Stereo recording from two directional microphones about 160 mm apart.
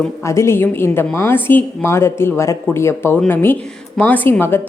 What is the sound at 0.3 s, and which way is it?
A woman's voice, 15° left (ahead or behind).